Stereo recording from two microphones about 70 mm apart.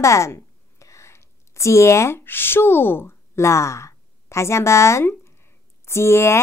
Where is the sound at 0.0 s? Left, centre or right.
Left.